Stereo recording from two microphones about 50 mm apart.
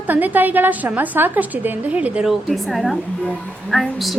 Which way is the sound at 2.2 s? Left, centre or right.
Centre.